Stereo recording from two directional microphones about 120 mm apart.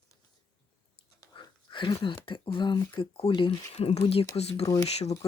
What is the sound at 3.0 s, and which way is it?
Speech, 50° left (ahead or behind).